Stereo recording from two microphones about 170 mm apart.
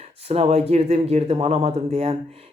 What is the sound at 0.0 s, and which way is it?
Speech, 40° right (ahead or behind).